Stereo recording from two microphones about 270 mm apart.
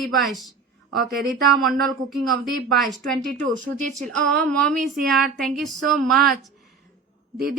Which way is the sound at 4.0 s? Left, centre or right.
Centre.